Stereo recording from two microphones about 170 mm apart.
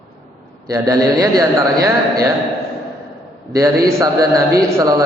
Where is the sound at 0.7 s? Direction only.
20° right (ahead or behind).